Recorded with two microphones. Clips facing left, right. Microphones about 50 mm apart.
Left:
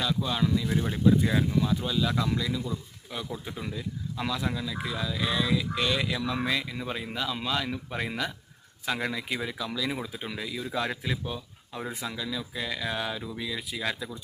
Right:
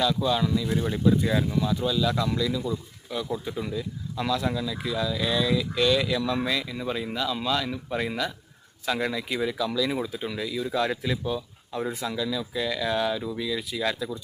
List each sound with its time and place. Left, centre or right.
0.0 s speech: centre
0.8 s speech: centre